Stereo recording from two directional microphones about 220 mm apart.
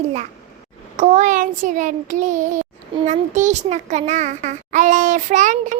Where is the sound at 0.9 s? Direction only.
35° right (ahead or behind).